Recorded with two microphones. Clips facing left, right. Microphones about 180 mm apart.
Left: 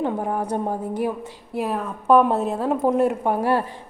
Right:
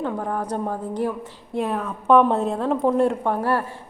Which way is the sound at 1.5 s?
5° left (ahead or behind).